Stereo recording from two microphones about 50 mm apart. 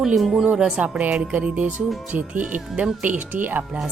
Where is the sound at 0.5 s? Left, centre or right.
Centre.